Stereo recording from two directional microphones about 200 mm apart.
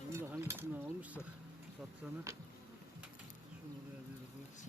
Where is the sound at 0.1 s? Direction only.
15° right (ahead or behind).